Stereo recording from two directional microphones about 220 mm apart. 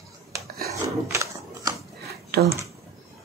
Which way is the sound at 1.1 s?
15° right (ahead or behind).